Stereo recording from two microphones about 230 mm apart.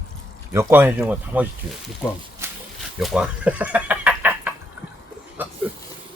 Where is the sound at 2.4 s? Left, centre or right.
Centre.